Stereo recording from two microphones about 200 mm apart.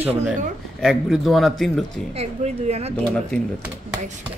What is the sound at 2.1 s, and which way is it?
Speech, 35° right (ahead or behind).